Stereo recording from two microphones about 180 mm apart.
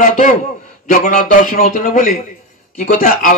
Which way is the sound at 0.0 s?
45° left (ahead or behind).